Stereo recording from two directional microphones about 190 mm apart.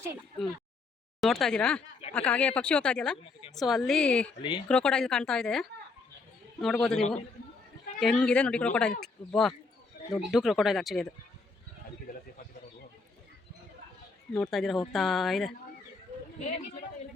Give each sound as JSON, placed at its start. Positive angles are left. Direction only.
{"t": 1.2, "sound": "speech", "side_deg": 0}
{"t": 4.4, "sound": "speech", "side_deg": 25}
{"t": 4.7, "sound": "speech", "side_deg": 5}
{"t": 14.3, "sound": "speech", "side_deg": 5}